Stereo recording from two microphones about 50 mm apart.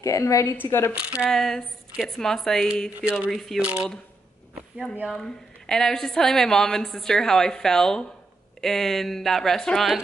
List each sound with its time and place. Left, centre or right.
0.0 s a woman's voice: left
0.7 s speech: left
0.9 s speech: right
1.3 s a woman's voice: centre
3.0 s speech: right
3.3 s speech: centre
3.6 s speech: right
5.1 s a woman's voice: centre